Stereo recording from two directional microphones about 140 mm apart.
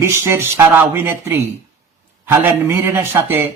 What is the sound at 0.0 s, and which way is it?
Mantra, 20° right (ahead or behind).